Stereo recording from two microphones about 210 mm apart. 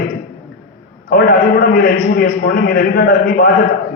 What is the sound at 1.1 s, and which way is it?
A man's voice, 45° left (ahead or behind).